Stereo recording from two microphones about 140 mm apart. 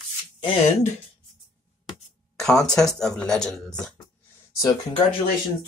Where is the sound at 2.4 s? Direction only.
5° left (ahead or behind).